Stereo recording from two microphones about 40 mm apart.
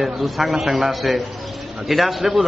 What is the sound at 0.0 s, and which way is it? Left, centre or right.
A man's voice, centre.